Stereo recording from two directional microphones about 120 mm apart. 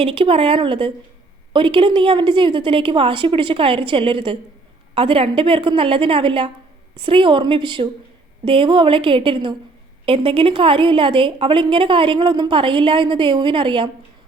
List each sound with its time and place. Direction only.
0.0 s a woman's voice: 50° right (ahead or behind)